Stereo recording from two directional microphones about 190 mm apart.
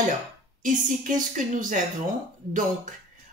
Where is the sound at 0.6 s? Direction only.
45° right (ahead or behind).